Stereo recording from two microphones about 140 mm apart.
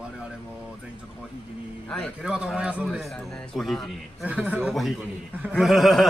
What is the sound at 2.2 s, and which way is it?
A man's voice, 5° right (ahead or behind).